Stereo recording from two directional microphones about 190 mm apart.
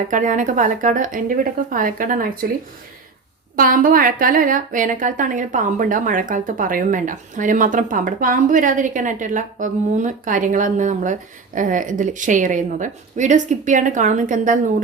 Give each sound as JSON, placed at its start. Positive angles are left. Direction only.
{"t": 0.1, "sound": "a woman's voice", "side_deg": -40}
{"t": 3.5, "sound": "a woman's voice", "side_deg": -45}